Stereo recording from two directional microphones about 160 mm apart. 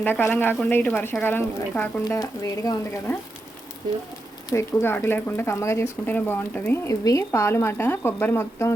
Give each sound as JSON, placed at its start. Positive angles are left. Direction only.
{"t": 0.0, "sound": "speech", "side_deg": 10}
{"t": 4.4, "sound": "speech", "side_deg": 15}